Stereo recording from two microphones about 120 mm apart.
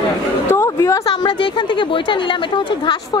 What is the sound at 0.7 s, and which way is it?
Speech, 30° left (ahead or behind).